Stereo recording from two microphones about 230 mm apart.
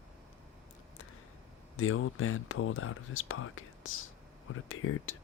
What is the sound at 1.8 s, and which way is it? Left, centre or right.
Speech, left.